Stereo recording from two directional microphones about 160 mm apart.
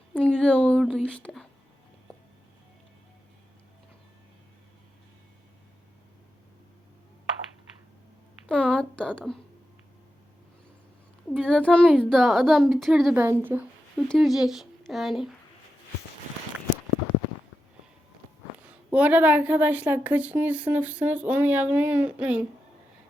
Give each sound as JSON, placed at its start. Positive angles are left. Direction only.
{"t": 0.1, "sound": "a woman's voice", "side_deg": 10}
{"t": 8.4, "sound": "a sound", "side_deg": 5}
{"t": 11.3, "sound": "a child's voice", "side_deg": 5}
{"t": 13.1, "sound": "a woman's voice", "side_deg": -15}
{"t": 14.1, "sound": "speech", "side_deg": 0}
{"t": 18.6, "sound": "a woman's voice", "side_deg": -10}